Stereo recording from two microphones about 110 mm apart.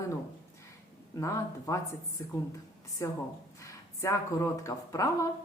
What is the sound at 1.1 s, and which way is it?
Speech, 30° left (ahead or behind).